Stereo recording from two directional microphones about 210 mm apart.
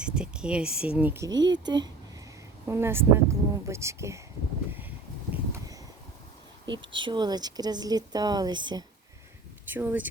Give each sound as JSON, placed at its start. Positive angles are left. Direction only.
{"t": 0.0, "sound": "speech", "side_deg": -5}
{"t": 5.3, "sound": "a sound", "side_deg": -15}
{"t": 6.7, "sound": "speech", "side_deg": -25}
{"t": 9.6, "sound": "speech", "side_deg": -10}